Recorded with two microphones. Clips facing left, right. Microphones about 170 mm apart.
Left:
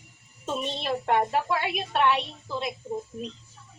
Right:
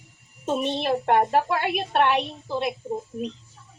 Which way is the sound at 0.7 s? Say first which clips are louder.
Right 3 dB; 50° right (ahead or behind).